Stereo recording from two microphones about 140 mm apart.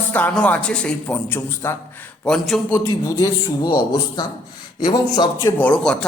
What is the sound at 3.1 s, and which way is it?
Speech, 25° left (ahead or behind).